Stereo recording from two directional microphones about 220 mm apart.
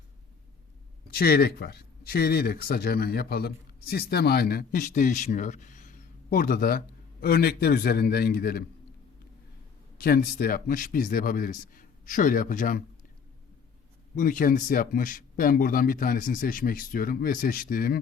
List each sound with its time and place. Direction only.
1.1 s speech: 45° left (ahead or behind)
10.0 s speech: 40° left (ahead or behind)
14.2 s speech: 40° left (ahead or behind)